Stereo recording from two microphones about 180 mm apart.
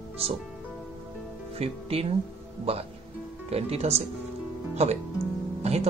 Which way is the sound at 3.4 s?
35° right (ahead or behind).